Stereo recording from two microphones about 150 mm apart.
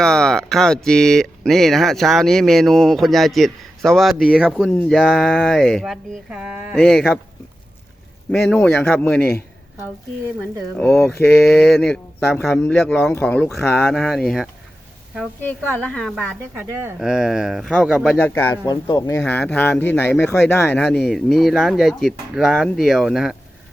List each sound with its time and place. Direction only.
0.0 s speech: 5° left (ahead or behind)
4.7 s speech: 10° left (ahead or behind)
4.9 s speech: centre (ahead or behind)
6.7 s speech: 5° left (ahead or behind)
8.3 s speech: 10° left (ahead or behind)
10.8 s speech: 5° left (ahead or behind)
11.6 s speech: 5° left (ahead or behind)
15.8 s speech: 5° left (ahead or behind)
16.6 s speech: 10° right (ahead or behind)
18.2 s speech: 15° left (ahead or behind)
19.2 s speech: 10° left (ahead or behind)
21.1 s speech: centre (ahead or behind)